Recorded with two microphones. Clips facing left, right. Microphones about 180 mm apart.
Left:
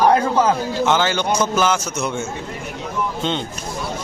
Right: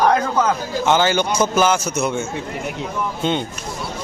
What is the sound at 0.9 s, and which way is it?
A man's voice, 5° right (ahead or behind).